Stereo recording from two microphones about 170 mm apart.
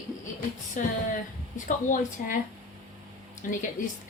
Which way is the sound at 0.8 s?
50° left (ahead or behind).